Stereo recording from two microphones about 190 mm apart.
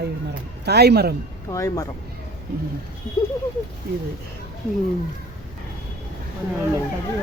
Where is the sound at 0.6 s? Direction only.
60° right (ahead or behind).